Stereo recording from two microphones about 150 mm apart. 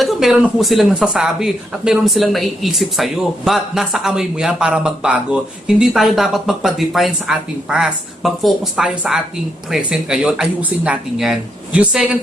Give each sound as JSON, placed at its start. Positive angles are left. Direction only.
{"t": 0.0, "sound": "speech", "side_deg": 0}